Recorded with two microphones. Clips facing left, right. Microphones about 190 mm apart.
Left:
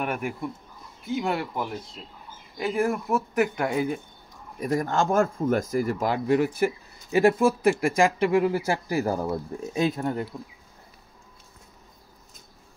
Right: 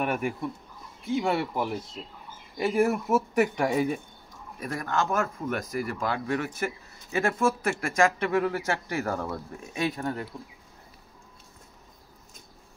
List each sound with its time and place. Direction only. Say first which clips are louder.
0.0 s speech: right 1 dB; 5° left (ahead or behind)
4.6 s speech: left 5 dB; 20° left (ahead or behind)
8.6 s speech: left 4 dB; 30° left (ahead or behind)
9.1 s speech: left 4 dB; 15° left (ahead or behind)
9.8 s speech: left 4 dB; 25° left (ahead or behind)